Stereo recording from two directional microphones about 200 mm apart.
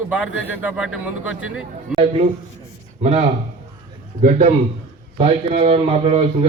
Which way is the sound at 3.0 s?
30° right (ahead or behind).